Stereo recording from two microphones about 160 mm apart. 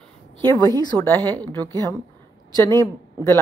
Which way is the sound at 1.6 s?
25° right (ahead or behind).